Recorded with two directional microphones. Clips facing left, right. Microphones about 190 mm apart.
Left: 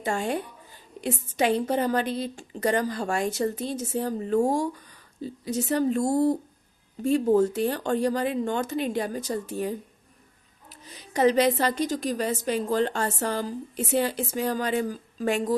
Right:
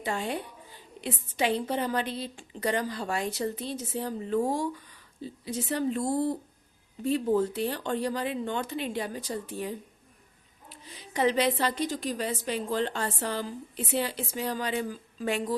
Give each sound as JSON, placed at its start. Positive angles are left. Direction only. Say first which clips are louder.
{"t": 0.0, "sound": "a woman's voice", "louder": "left 4 dB", "side_deg": 45}